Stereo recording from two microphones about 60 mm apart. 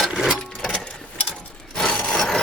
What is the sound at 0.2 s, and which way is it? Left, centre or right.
Sewing machine, centre.